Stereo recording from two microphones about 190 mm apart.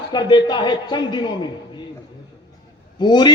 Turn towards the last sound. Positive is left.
turn(degrees=25)  # may be behind; listen again after turning